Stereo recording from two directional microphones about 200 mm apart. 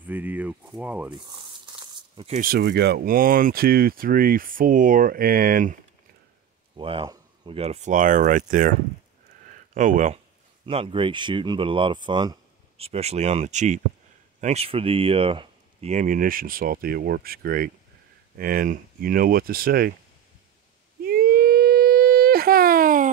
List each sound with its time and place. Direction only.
0.0 s speech: 10° right (ahead or behind)
1.1 s tearing: 25° right (ahead or behind)
2.4 s speech: 55° right (ahead or behind)
6.8 s speech: 25° right (ahead or behind); by 8.7 s 40° right (ahead or behind)
9.8 s speech: 40° right (ahead or behind)
10.6 s speech: 30° right (ahead or behind); by 19.9 s 45° right (ahead or behind)
21.0 s wail: 50° right (ahead or behind)